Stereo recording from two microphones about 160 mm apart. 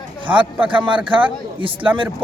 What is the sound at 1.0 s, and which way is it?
Speech, 30° right (ahead or behind).